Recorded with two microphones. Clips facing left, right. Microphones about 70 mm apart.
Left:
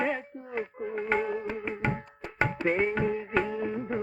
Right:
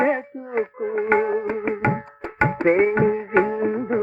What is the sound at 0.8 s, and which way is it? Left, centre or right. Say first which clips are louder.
Music: right 9 dB; right.